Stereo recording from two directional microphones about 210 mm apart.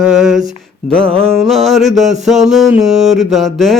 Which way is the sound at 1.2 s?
Centre (ahead or behind).